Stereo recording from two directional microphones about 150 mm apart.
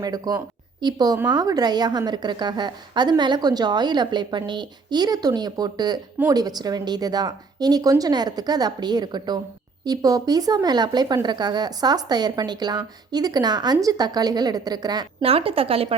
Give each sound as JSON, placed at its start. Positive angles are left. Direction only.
{"t": 0.0, "sound": "speech", "side_deg": -25}
{"t": 15.2, "sound": "a woman's voice", "side_deg": -40}